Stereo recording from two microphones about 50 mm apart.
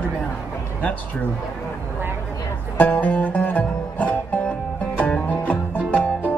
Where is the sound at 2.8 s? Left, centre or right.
Left.